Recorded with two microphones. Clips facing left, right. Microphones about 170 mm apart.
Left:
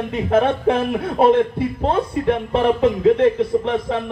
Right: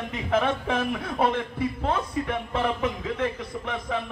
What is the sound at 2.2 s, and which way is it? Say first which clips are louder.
Speech: left 13 dB; 60° left (ahead or behind).